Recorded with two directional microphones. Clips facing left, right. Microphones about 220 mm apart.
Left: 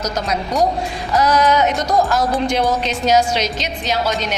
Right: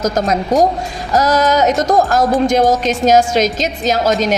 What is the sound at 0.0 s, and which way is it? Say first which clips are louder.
Speech: right 6 dB; 45° right (ahead or behind).